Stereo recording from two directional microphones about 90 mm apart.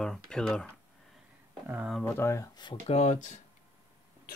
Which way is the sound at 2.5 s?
60° left (ahead or behind).